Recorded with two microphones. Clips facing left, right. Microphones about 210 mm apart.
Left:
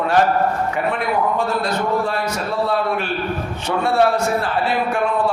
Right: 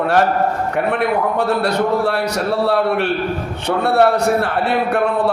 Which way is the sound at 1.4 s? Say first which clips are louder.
Right 4 dB; 65° right (ahead or behind).